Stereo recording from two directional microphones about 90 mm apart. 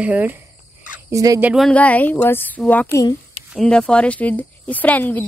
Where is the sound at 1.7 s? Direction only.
15° left (ahead or behind).